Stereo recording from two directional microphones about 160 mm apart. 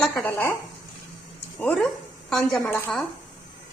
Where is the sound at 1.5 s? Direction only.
5° left (ahead or behind).